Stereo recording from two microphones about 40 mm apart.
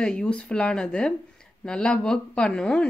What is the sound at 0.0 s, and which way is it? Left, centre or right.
Speech, left.